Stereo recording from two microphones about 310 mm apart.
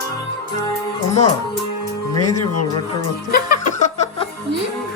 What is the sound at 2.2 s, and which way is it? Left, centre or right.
Speech, left.